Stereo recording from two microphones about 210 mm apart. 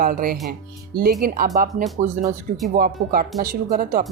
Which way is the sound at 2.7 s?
45° right (ahead or behind).